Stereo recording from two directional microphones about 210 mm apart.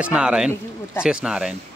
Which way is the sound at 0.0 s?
5° right (ahead or behind).